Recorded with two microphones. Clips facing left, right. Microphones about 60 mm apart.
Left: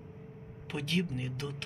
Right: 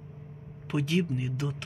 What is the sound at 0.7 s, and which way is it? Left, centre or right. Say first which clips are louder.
Speech: right 5 dB; centre.